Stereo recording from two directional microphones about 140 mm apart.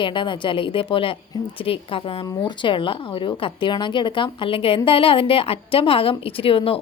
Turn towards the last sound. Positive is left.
turn(degrees=40)  # may be behind; listen again after turning